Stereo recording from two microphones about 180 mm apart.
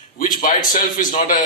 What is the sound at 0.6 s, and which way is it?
Speech, 45° left (ahead or behind).